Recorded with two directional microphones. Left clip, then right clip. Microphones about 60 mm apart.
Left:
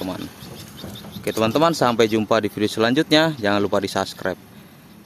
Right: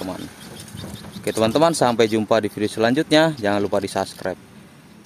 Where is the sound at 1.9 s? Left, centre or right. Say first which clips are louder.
Even; centre.